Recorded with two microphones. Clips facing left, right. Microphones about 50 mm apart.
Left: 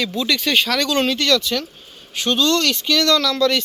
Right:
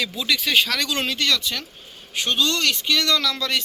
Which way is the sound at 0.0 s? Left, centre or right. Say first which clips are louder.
Left 3 dB; centre.